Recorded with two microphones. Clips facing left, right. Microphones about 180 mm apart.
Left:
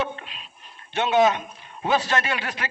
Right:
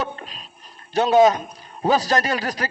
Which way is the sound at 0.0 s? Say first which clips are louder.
Even; 40° right (ahead or behind).